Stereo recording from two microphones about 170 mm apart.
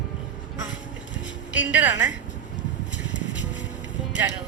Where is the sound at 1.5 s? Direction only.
10° right (ahead or behind).